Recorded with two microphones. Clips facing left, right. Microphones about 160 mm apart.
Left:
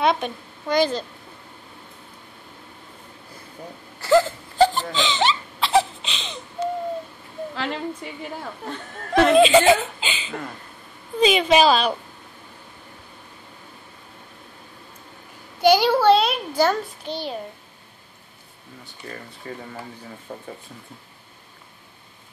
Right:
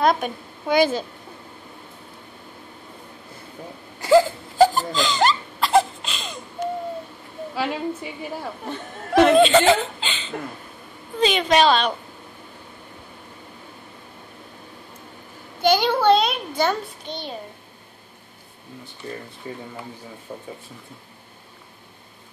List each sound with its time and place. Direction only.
0.0 s a woman's voice: 5° right (ahead or behind)
4.0 s crying: 15° right (ahead or behind)
7.5 s speech: 10° right (ahead or behind)
9.3 s a woman's voice: 5° left (ahead or behind)
15.6 s a sound: 10° left (ahead or behind)
19.4 s speech: 15° right (ahead or behind)